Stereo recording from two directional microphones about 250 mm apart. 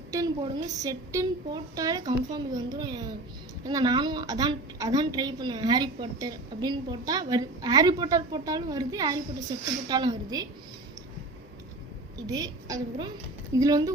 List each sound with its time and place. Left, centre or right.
0.1 s a woman's voice: centre
12.2 s a woman's voice: centre